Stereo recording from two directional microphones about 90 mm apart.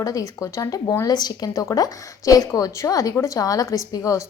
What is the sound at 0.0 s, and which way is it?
A woman's voice, 40° left (ahead or behind).